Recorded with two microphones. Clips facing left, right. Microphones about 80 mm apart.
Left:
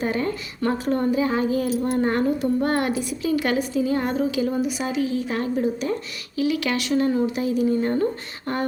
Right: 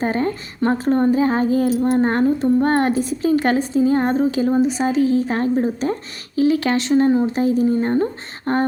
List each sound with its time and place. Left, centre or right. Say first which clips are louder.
0.0 s a woman's voice: right 4 dB; right